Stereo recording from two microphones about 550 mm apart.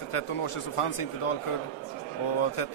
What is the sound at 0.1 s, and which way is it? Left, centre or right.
A man's voice, left.